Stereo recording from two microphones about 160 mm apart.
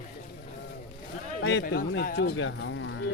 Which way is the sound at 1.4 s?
80° left.